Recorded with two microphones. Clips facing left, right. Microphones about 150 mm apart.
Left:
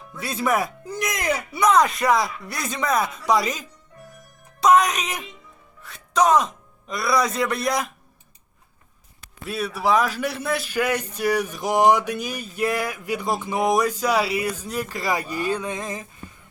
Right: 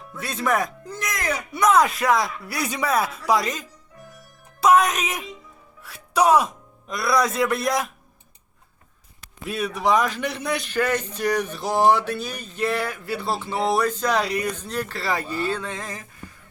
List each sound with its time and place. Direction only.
0.1 s speech: centre (ahead or behind)
1.5 s speech: centre (ahead or behind)
9.5 s a man's voice: centre (ahead or behind); by 16.0 s 20° left (ahead or behind)